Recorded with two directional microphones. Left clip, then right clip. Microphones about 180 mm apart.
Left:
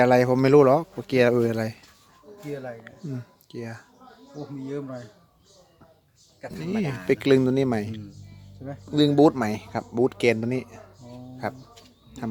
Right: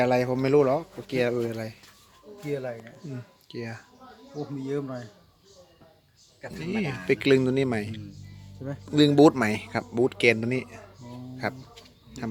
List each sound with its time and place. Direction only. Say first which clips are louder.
0.0 s speech: left 5 dB; 50° left (ahead or behind)
2.5 s speech: right 3 dB; 40° right (ahead or behind)
3.5 s a man's voice: even; 5° left (ahead or behind)
4.6 s speech: right 2 dB; 55° right (ahead or behind)
6.6 s a man's voice: left 1 dB; 20° left (ahead or behind)
8.9 s a man's voice: even; 5° left (ahead or behind)